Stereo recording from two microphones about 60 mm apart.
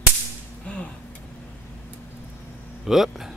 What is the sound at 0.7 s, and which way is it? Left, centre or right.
Speech, left.